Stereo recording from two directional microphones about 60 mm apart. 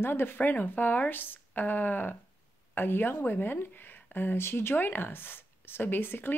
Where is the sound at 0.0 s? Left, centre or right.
Left.